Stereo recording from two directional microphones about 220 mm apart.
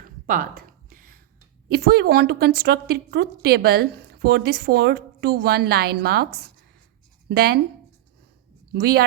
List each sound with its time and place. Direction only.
0.0 s a sound: 40° right (ahead or behind)
1.7 s a woman's voice: 45° right (ahead or behind)
7.3 s a woman's voice: 45° right (ahead or behind)
8.7 s a woman's voice: 45° right (ahead or behind)